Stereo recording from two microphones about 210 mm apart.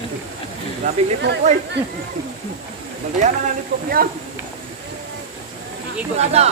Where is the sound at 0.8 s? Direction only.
35° right (ahead or behind).